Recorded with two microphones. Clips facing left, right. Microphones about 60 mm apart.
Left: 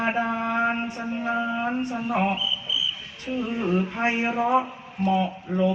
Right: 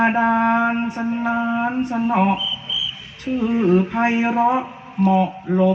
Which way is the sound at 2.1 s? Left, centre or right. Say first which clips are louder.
Right 4 dB; right.